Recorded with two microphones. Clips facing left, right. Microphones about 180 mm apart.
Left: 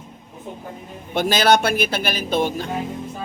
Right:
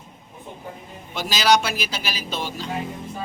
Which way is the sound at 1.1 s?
55° left (ahead or behind).